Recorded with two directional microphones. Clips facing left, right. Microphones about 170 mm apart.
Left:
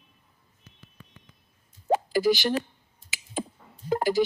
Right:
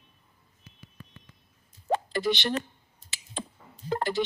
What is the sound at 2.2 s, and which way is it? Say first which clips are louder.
Plop: left 6 dB; 55° left (ahead or behind).